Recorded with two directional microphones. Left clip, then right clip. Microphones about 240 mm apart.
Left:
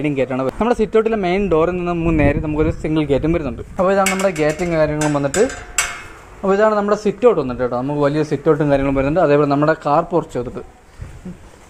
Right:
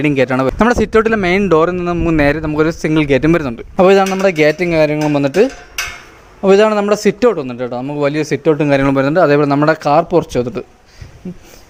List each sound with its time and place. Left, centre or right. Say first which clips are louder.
0.0 s speech: right 6 dB; right